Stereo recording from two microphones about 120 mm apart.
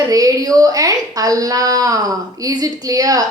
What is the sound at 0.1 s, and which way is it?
Speech, 30° right (ahead or behind).